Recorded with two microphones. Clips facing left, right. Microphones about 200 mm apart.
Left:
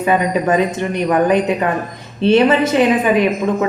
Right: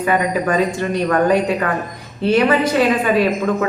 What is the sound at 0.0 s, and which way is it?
A woman's voice, 20° left (ahead or behind).